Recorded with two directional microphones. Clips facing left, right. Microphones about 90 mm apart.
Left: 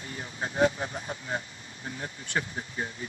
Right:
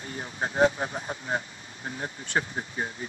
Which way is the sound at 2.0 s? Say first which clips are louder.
Right 3 dB; 30° right (ahead or behind).